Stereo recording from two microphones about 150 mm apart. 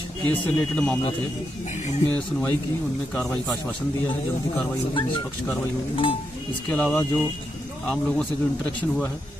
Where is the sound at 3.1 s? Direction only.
5° left (ahead or behind).